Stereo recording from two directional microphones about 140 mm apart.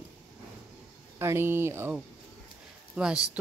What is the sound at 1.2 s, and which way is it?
Speech, 15° right (ahead or behind).